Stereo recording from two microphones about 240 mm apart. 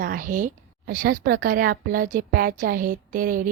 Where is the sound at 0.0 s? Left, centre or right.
Right.